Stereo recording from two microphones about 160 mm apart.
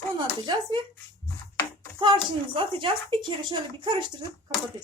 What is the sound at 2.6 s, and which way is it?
Speech, 30° right (ahead or behind).